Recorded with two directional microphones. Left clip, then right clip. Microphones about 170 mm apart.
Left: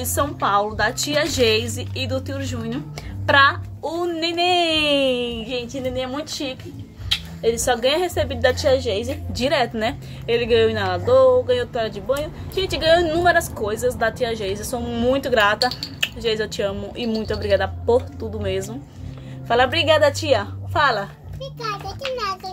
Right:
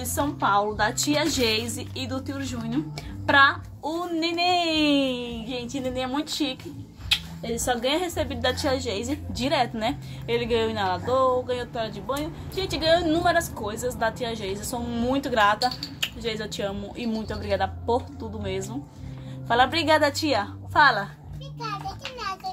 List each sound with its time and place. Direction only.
0.0 s speech: 20° left (ahead or behind)
5.7 s a woman's voice: 5° right (ahead or behind)
21.4 s a child's voice: 35° left (ahead or behind)